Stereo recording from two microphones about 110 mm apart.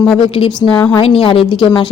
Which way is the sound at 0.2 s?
55° left (ahead or behind).